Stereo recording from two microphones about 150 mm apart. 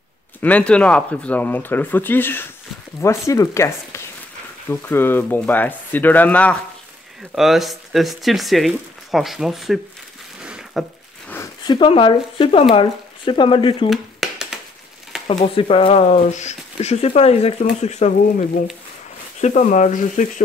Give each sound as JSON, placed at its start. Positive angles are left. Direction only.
{"t": 0.4, "sound": "speech", "side_deg": 10}
{"t": 7.3, "sound": "speech", "side_deg": 0}
{"t": 10.4, "sound": "a sound", "side_deg": -5}
{"t": 11.6, "sound": "speech", "side_deg": 30}
{"t": 13.8, "sound": "a sound", "side_deg": 0}
{"t": 15.2, "sound": "speech", "side_deg": 40}
{"t": 19.4, "sound": "speech", "side_deg": 50}